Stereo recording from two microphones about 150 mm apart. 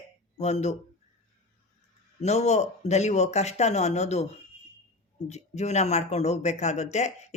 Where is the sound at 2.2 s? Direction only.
45° left (ahead or behind).